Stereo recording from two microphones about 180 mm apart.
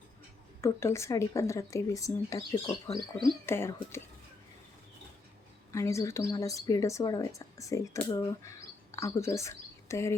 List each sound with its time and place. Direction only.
0.6 s speech: 15° left (ahead or behind)
5.7 s speech: 15° left (ahead or behind)